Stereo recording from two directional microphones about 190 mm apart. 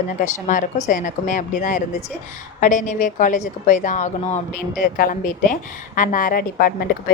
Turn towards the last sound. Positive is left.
turn(degrees=55)  # may be behind; listen again after turning